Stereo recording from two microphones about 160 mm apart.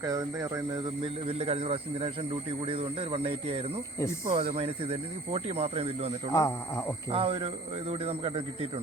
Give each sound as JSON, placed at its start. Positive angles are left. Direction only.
{"t": 0.0, "sound": "speech", "side_deg": -20}
{"t": 1.0, "sound": "a man's voice", "side_deg": -40}
{"t": 6.3, "sound": "speech", "side_deg": 20}
{"t": 7.1, "sound": "a man's voice", "side_deg": -35}